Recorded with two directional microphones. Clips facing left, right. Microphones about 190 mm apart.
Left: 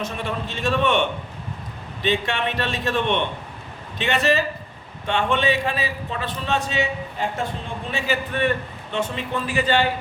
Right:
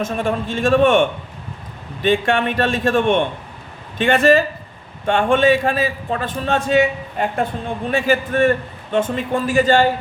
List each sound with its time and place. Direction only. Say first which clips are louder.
0.0 s a man's voice: right 7 dB; 50° right (ahead or behind)